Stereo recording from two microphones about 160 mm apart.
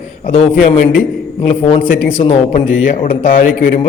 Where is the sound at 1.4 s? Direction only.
40° left (ahead or behind).